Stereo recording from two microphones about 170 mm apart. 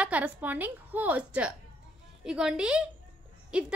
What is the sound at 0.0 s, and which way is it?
A woman's voice, 10° right (ahead or behind).